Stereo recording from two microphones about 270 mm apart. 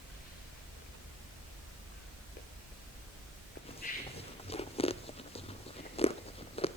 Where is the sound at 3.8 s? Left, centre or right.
Left.